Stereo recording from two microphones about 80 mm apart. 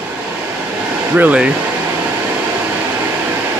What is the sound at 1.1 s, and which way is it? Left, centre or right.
Speech, centre.